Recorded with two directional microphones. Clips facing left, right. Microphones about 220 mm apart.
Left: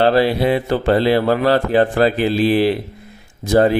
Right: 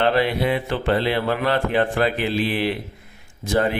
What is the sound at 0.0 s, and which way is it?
Speech, 35° left (ahead or behind).